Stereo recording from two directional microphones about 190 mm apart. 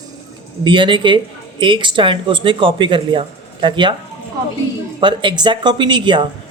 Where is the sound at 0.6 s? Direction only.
25° right (ahead or behind).